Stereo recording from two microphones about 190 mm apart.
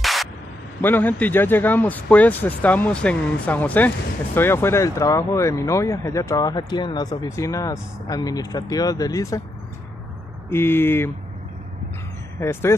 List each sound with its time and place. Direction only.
0.0 s whip: centre (ahead or behind)
0.7 s speech: 10° left (ahead or behind)
10.5 s speech: 10° left (ahead or behind)
12.4 s speech: 15° left (ahead or behind)